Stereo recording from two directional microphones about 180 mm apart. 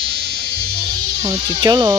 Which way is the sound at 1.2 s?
20° right (ahead or behind).